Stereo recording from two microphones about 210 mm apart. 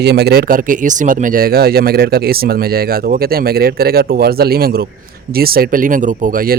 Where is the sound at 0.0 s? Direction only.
50° right (ahead or behind).